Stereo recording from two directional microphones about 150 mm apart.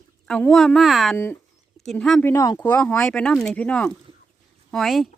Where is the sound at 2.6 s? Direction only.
10° left (ahead or behind).